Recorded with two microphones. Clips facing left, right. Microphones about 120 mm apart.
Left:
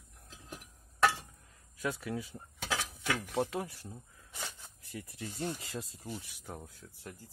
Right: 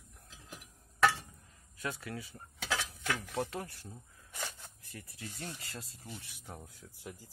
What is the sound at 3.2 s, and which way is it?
Speech, 20° left (ahead or behind).